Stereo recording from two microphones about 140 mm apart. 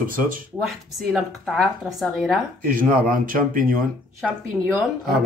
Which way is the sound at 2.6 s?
90° right.